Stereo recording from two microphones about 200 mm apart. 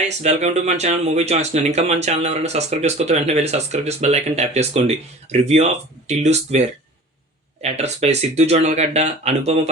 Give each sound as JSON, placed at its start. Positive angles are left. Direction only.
{"t": 0.2, "sound": "speech", "side_deg": -35}